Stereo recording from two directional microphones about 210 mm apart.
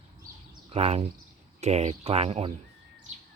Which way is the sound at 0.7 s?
30° right (ahead or behind).